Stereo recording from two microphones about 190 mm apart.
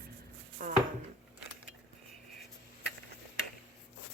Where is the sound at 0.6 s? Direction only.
45° right (ahead or behind).